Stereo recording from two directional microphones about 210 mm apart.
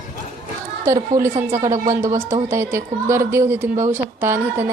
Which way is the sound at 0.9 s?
15° right (ahead or behind).